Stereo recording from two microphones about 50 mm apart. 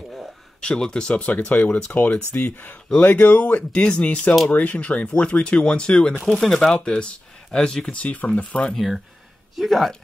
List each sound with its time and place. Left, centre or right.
0.6 s speech: centre
1.2 s speech: left
6.3 s speech: centre
8.0 s speech: left
8.7 s speech: centre